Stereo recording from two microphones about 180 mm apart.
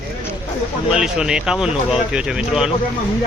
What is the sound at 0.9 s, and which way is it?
Speech, 5° right (ahead or behind).